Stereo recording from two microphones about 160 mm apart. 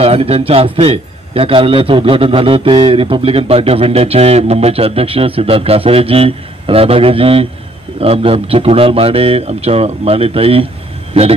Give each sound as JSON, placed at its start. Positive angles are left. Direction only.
{"t": 0.0, "sound": "a man's voice", "side_deg": -40}